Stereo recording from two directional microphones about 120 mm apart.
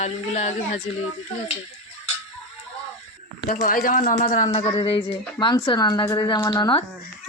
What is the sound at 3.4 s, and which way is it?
Speech, 90° left.